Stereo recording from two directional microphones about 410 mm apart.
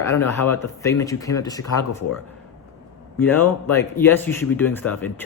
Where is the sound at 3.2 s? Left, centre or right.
Centre.